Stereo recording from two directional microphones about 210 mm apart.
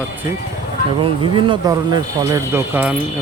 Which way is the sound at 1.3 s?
20° right (ahead or behind).